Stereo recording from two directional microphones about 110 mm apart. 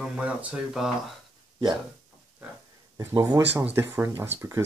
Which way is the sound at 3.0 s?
30° right (ahead or behind).